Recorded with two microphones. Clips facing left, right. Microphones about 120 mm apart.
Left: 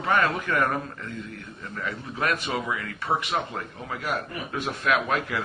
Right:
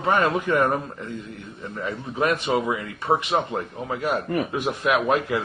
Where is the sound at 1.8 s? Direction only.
20° right (ahead or behind).